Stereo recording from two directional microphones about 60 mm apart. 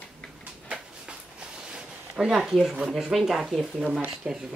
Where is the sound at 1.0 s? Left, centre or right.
Centre.